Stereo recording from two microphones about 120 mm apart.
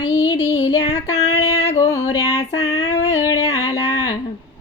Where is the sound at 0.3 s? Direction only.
15° right (ahead or behind).